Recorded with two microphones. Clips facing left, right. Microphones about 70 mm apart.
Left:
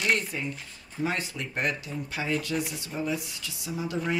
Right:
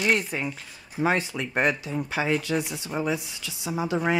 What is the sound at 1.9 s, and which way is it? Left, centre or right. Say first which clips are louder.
Speech: right 5 dB; right.